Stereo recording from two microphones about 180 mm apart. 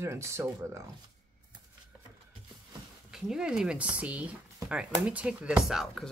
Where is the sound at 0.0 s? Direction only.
15° right (ahead or behind).